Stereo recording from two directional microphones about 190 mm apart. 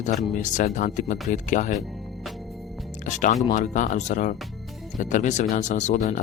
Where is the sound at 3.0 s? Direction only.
40° left (ahead or behind).